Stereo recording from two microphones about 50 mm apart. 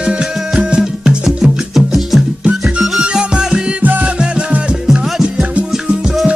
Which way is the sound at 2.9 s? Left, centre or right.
Centre.